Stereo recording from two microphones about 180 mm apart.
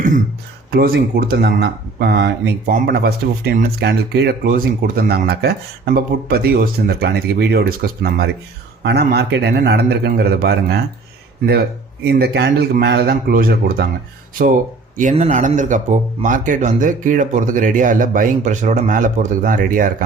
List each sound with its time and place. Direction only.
0.7 s speech: 60° right (ahead or behind)
4.4 s speech: 55° right (ahead or behind)
12.0 s speech: 65° right (ahead or behind)
15.1 s speech: 40° right (ahead or behind)